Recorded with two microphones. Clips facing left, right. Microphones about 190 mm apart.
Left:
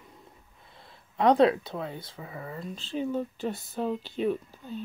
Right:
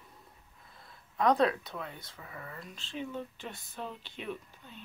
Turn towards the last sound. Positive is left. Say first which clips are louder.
# left 9 dB
turn(degrees=35)  # may be behind; listen again after turning